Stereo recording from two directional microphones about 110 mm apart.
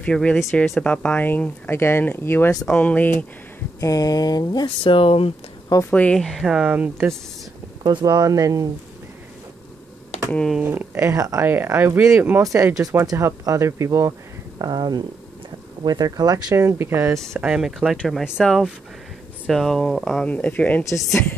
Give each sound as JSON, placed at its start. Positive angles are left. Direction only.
{"t": 0.0, "sound": "speech", "side_deg": 10}
{"t": 2.6, "sound": "speech", "side_deg": 10}
{"t": 3.8, "sound": "speech", "side_deg": 35}
{"t": 4.8, "sound": "speech", "side_deg": 55}
{"t": 5.9, "sound": "speech", "side_deg": 15}
{"t": 7.8, "sound": "speech", "side_deg": -40}
{"t": 10.6, "sound": "speech", "side_deg": -20}
{"t": 14.6, "sound": "speech", "side_deg": -40}
{"t": 17.5, "sound": "speech", "side_deg": -5}
{"t": 20.2, "sound": "speech", "side_deg": 10}
{"t": 20.8, "sound": "speech", "side_deg": 30}